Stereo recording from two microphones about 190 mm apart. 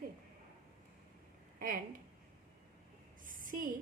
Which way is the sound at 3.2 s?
45° right (ahead or behind).